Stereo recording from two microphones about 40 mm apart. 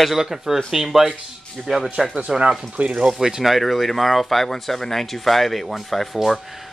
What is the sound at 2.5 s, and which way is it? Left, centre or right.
Speech, centre.